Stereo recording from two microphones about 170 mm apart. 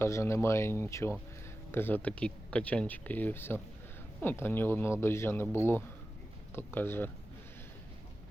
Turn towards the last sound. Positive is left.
turn(degrees=10)  # may be behind; listen again after turning